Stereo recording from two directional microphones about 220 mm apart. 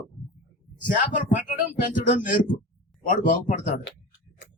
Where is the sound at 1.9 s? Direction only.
35° left (ahead or behind).